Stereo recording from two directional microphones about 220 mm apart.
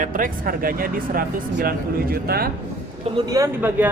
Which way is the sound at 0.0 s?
40° right (ahead or behind).